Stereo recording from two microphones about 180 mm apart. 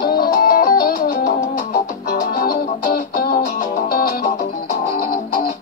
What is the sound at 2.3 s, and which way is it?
Music, 55° left (ahead or behind).